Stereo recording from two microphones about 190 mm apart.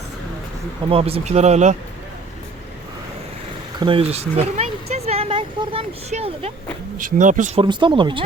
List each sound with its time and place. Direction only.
0.9 s speech: 30° right (ahead or behind)
3.8 s speech: 25° right (ahead or behind)
7.6 s speech: 25° right (ahead or behind)